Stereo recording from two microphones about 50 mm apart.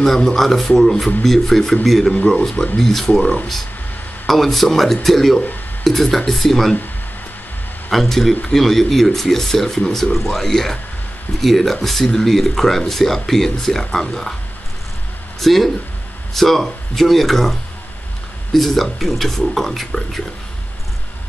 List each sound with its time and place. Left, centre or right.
0.0 s a man's voice: centre
2.1 s speech: left
2.8 s a man's voice: centre
4.3 s speech: centre
7.9 s a man's voice: centre
15.4 s speech: centre